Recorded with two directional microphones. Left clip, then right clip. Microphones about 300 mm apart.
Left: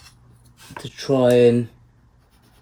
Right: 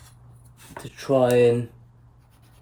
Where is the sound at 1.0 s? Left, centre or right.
Left.